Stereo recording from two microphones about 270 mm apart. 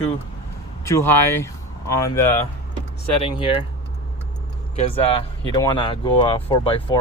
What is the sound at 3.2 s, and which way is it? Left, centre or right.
Speech, centre.